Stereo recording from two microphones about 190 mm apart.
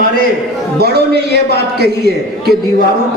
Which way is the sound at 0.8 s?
60° right (ahead or behind).